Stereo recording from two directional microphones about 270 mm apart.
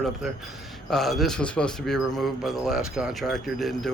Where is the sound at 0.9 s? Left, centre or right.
Centre.